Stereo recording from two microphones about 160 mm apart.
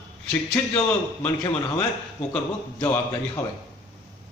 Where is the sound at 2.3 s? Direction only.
15° left (ahead or behind).